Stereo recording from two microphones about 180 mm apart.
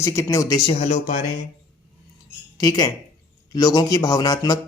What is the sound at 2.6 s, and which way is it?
Speech, 20° left (ahead or behind).